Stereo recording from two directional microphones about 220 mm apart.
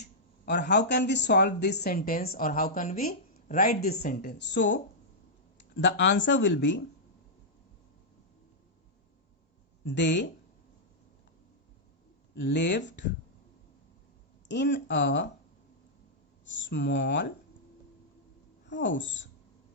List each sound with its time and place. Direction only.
0.0 s speech: 50° left (ahead or behind)
9.8 s speech: 55° left (ahead or behind)
12.3 s speech: 50° left (ahead or behind)
14.4 s speech: 50° left (ahead or behind)
16.5 s speech: 55° left (ahead or behind)
18.6 s a woman's voice: 55° left (ahead or behind)